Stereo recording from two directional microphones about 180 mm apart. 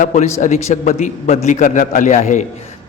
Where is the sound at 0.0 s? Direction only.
40° left (ahead or behind).